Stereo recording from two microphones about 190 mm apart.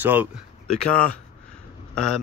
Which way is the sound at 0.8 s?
5° left (ahead or behind).